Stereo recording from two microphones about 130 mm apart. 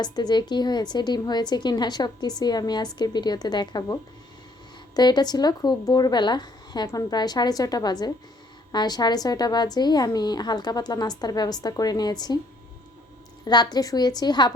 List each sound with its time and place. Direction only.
0.0 s a woman's voice: 35° left (ahead or behind)
4.9 s a woman's voice: 30° left (ahead or behind)
13.4 s a woman's voice: 30° left (ahead or behind)